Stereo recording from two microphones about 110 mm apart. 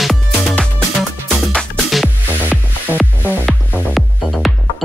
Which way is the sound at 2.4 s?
15° right (ahead or behind).